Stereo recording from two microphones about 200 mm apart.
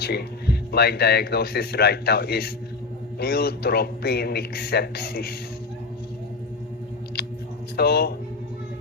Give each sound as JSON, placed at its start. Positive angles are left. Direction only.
{"t": 0.0, "sound": "speech", "side_deg": 55}
{"t": 7.8, "sound": "speech", "side_deg": 50}